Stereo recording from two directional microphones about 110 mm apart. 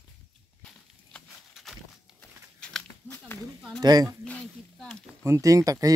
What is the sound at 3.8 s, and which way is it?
Speech, 35° right (ahead or behind).